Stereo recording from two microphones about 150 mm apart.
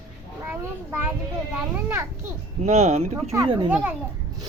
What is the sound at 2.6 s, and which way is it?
Speech, 45° right (ahead or behind).